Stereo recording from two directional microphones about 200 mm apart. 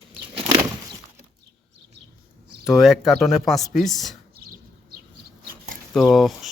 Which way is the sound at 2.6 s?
Centre (ahead or behind).